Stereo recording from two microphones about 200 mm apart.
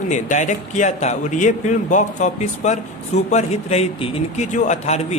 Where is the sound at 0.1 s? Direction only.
40° left (ahead or behind).